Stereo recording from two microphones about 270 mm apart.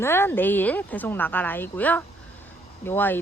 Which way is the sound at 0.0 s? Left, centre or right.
Centre.